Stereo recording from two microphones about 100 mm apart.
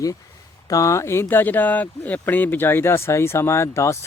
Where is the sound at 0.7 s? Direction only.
30° left (ahead or behind).